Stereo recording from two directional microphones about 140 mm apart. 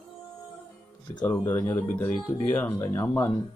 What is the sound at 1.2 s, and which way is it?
Speech, 15° left (ahead or behind).